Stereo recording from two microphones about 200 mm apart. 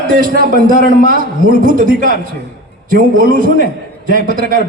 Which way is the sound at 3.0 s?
45° right (ahead or behind).